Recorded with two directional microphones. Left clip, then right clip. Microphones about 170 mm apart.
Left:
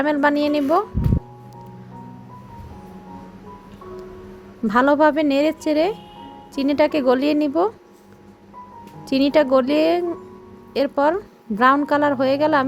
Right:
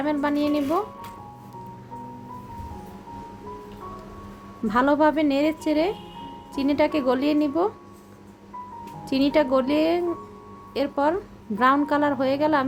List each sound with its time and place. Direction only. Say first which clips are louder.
0.0 s a woman's voice: left 6 dB; 40° left (ahead or behind)
4.7 s a woman's voice: left 4 dB; 40° left (ahead or behind)
9.0 s a woman's voice: left 4 dB; 40° left (ahead or behind)